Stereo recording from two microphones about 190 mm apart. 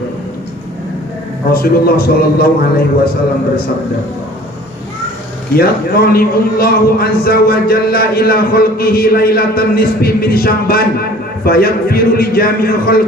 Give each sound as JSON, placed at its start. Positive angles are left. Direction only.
{"t": 1.5, "sound": "a man's voice", "side_deg": 50}
{"t": 5.5, "sound": "a man's voice", "side_deg": 55}